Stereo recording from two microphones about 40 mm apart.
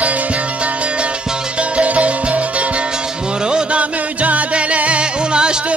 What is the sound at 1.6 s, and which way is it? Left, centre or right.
Music, right.